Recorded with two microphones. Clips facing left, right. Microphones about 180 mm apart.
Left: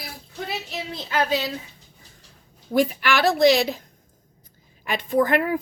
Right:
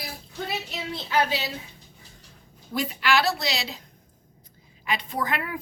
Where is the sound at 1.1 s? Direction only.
45° left (ahead or behind).